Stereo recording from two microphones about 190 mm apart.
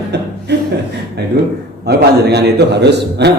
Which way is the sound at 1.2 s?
60° right (ahead or behind).